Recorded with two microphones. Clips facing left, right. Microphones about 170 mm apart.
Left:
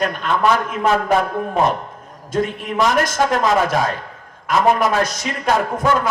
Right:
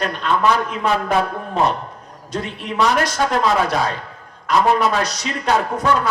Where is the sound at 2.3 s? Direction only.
50° left (ahead or behind).